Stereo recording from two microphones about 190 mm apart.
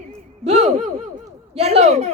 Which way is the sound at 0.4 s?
35° right (ahead or behind).